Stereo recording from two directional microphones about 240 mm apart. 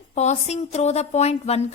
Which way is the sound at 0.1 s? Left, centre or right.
Left.